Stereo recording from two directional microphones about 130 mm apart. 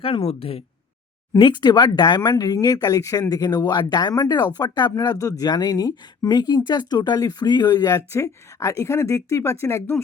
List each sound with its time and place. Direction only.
0.0 s speech: 45° left (ahead or behind)
1.4 s speech: 35° left (ahead or behind)